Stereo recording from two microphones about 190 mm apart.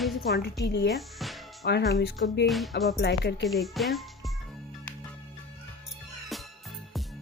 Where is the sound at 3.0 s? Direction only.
60° left (ahead or behind).